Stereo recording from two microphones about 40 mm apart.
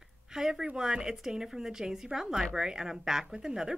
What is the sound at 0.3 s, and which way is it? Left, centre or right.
Speech, centre.